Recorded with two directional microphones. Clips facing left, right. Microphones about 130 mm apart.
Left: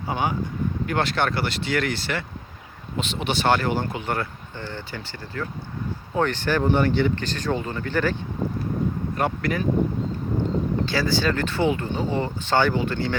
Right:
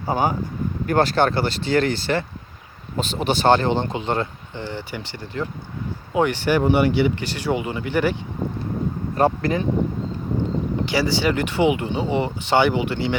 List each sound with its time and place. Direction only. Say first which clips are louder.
0.1 s speech: right 4 dB; 40° right (ahead or behind); by 8.1 s 15° right (ahead or behind)
9.1 s speech: right 7 dB; 30° right (ahead or behind)
10.8 s speech: right 5 dB; 15° right (ahead or behind)